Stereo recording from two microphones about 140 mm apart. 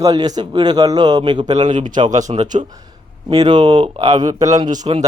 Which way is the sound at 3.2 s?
30° right (ahead or behind).